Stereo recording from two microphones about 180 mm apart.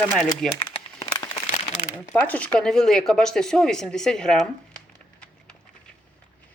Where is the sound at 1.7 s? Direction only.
40° left (ahead or behind).